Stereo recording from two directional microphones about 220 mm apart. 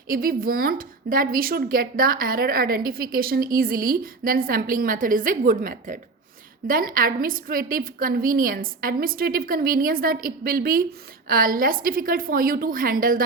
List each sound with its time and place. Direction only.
0.1 s speech: 40° right (ahead or behind)